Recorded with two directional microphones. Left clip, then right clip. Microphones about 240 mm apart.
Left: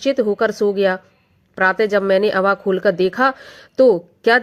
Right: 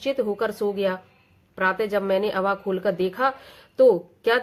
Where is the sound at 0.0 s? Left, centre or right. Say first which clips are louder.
Left 7 dB; left.